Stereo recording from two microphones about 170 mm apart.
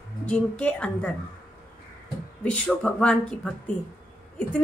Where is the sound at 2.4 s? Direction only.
5° left (ahead or behind).